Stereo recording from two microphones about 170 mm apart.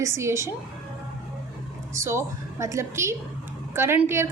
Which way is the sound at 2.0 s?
15° right (ahead or behind).